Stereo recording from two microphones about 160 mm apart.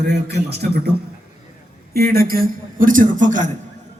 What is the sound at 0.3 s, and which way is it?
Speech, 90° right.